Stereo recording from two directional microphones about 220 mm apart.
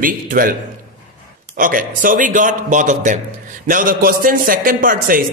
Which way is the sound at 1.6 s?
40° right (ahead or behind).